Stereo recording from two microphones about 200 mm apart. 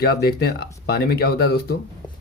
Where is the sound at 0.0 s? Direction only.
50° left (ahead or behind).